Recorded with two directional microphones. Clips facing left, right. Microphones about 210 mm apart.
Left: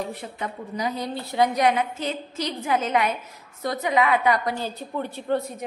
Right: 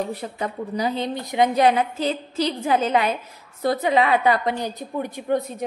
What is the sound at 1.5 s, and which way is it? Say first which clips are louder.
A woman's voice: right 3 dB; 30° right (ahead or behind).